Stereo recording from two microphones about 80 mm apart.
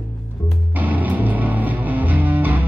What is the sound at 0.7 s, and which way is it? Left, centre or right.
Music, right.